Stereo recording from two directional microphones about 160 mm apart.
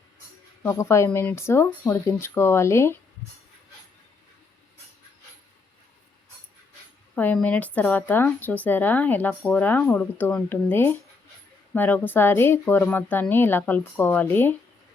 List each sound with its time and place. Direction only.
0.6 s speech: 15° left (ahead or behind)
7.2 s speech: 10° left (ahead or behind)